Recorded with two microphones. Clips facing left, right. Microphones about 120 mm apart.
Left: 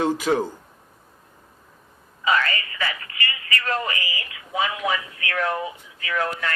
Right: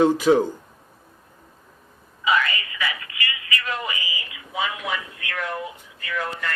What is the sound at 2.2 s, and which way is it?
Telephone, 40° left (ahead or behind).